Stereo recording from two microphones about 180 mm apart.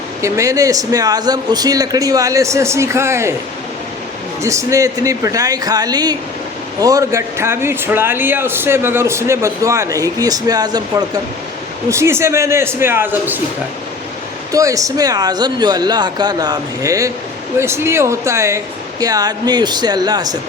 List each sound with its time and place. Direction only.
0.2 s a man's voice: 15° right (ahead or behind)
4.4 s a man's voice: 15° right (ahead or behind)
14.5 s a man's voice: 20° right (ahead or behind)